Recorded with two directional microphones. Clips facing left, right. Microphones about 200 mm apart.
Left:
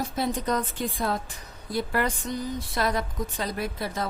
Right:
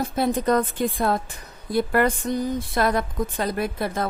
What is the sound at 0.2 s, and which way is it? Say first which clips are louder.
Speech: right 7 dB; 55° right (ahead or behind).